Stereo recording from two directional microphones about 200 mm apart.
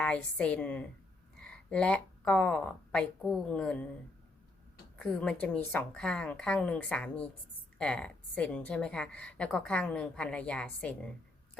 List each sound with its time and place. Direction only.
0.0 s a woman's voice: 5° left (ahead or behind)
4.9 s a woman's voice: 5° left (ahead or behind)